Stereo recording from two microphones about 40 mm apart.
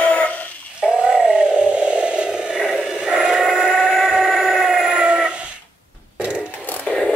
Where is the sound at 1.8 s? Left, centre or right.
Right.